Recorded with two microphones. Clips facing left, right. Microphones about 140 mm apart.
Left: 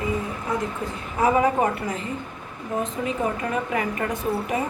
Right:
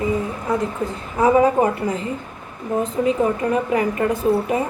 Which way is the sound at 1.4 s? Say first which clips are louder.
Right 5 dB; 30° right (ahead or behind).